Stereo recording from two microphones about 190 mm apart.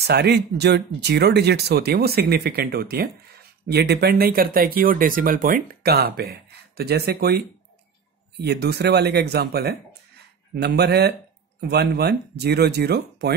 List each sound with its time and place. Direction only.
0.0 s speech: 60° right (ahead or behind)